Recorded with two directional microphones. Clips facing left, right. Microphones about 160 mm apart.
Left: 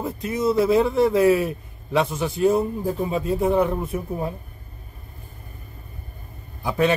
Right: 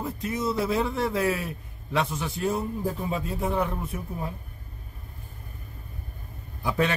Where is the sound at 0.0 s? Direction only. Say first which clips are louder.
Left 5 dB; 10° left (ahead or behind).